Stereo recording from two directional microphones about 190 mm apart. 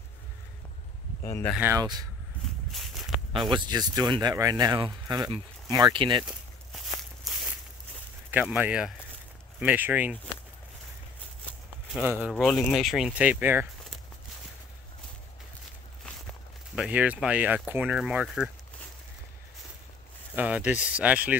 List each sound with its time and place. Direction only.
1.2 s speech: 15° left (ahead or behind)
1.6 s speech: 15° right (ahead or behind)
3.3 s speech: 25° right (ahead or behind)
8.3 s speech: 10° right (ahead or behind)
11.9 s speech: 5° right (ahead or behind)
16.7 s speech: 5° right (ahead or behind)
20.3 s speech: 5° right (ahead or behind)